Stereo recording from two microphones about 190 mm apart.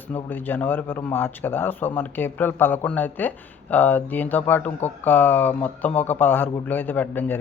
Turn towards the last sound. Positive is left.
turn(degrees=10)  # may be behind; listen again after turning